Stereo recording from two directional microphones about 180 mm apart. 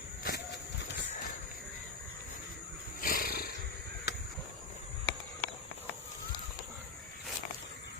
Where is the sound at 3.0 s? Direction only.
50° left (ahead or behind).